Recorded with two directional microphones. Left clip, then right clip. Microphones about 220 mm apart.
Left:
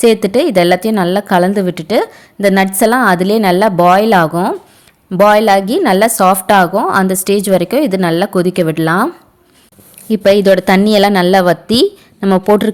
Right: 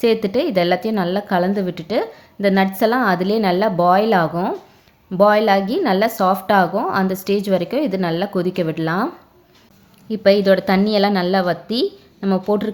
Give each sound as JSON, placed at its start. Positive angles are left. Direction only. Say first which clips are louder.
{"t": 0.0, "sound": "a woman's voice", "louder": "left 7 dB", "side_deg": 50}